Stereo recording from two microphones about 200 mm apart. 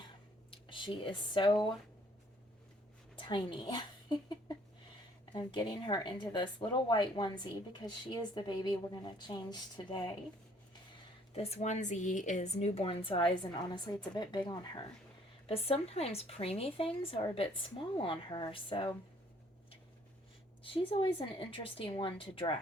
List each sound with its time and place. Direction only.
0.5 s speech: 25° left (ahead or behind)
3.2 s a woman's voice: 25° left (ahead or behind)
11.3 s speech: 35° left (ahead or behind)
20.7 s speech: 25° left (ahead or behind)